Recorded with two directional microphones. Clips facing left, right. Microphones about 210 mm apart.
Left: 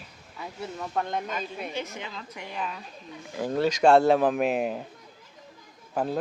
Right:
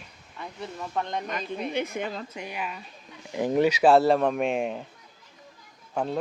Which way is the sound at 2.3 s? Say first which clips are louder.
Right 2 dB; 20° right (ahead or behind).